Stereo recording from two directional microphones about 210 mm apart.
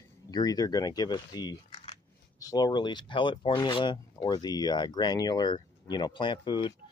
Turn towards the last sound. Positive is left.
turn(degrees=20)  # may be behind; listen again after turning